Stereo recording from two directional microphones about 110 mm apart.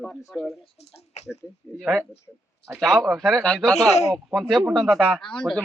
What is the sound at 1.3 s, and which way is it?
Speech, 5° left (ahead or behind).